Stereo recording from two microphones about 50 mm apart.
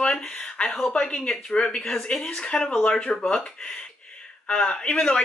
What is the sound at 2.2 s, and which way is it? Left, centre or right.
Speech, left.